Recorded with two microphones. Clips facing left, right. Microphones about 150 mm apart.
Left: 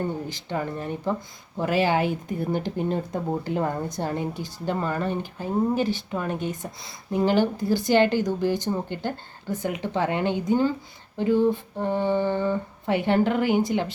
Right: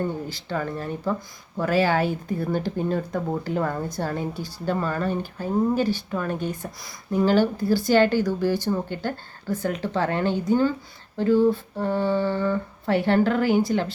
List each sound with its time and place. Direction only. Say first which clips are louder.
0.3 s speech: right 1 dB; 20° left (ahead or behind)